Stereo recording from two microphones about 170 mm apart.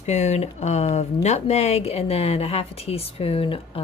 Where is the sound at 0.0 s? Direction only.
40° left (ahead or behind).